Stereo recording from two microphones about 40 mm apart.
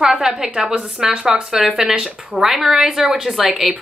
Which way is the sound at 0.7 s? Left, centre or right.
Right.